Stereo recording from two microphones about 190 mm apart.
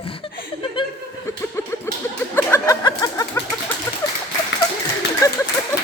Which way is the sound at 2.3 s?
15° left (ahead or behind).